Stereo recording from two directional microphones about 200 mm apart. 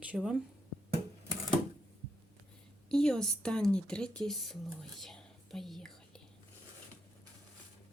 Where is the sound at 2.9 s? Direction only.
5° left (ahead or behind).